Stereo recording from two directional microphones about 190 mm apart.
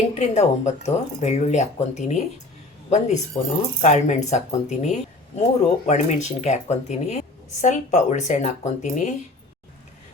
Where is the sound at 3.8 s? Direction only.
35° left (ahead or behind).